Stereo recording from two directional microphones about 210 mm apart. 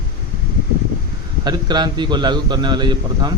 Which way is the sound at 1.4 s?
20° right (ahead or behind).